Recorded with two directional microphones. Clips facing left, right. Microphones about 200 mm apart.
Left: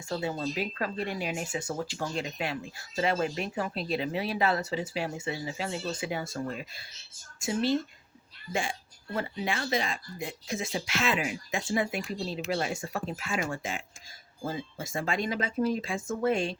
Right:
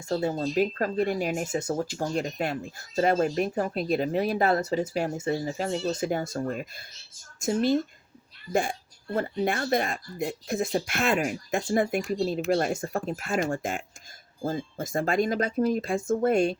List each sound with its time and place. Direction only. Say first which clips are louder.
0.1 s speech: right 5 dB; 40° right (ahead or behind)
9.1 s speech: right 5 dB; 45° right (ahead or behind)